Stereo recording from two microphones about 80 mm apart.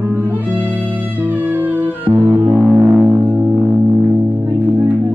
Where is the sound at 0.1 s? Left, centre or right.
Right.